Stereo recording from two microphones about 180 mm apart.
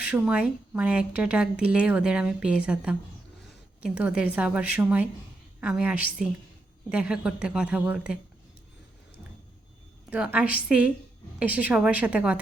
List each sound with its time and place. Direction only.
0.1 s speech: 5° right (ahead or behind)
3.8 s a woman's voice: 5° right (ahead or behind)
6.9 s a woman's voice: 5° right (ahead or behind)
10.1 s speech: 5° right (ahead or behind)